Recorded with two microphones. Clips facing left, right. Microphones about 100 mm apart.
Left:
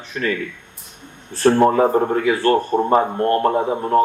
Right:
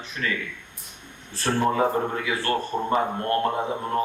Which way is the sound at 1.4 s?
50° left (ahead or behind).